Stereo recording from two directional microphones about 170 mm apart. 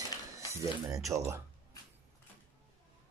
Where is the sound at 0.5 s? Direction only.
20° right (ahead or behind).